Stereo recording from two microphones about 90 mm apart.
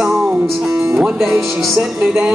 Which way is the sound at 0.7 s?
30° right (ahead or behind).